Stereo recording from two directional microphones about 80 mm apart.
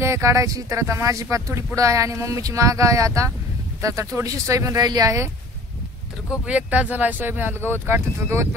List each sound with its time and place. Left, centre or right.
0.0 s speech: right
6.4 s speech: centre; by 8.5 s right